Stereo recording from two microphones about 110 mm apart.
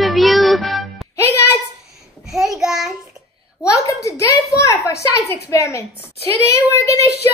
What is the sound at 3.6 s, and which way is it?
A woman's voice, 30° left (ahead or behind).